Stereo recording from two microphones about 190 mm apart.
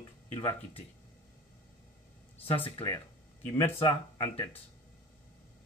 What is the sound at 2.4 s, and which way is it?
Speech, 30° left (ahead or behind).